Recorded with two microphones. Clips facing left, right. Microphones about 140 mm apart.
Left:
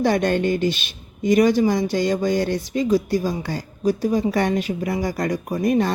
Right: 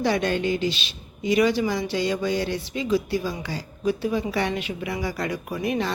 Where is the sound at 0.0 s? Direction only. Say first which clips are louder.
Left 4 dB; 50° left (ahead or behind).